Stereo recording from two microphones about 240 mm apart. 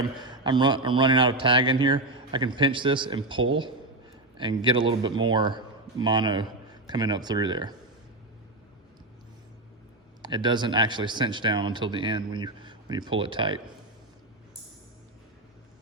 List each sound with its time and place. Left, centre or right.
0.3 s a man's voice: centre
10.2 s speech: centre